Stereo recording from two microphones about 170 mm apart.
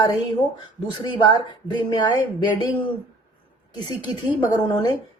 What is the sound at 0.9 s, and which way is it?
Speech, 25° left (ahead or behind).